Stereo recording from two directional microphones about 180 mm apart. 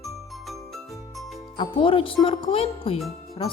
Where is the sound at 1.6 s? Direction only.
30° left (ahead or behind).